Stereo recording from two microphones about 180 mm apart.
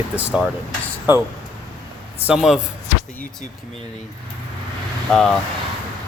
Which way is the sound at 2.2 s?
5° right (ahead or behind).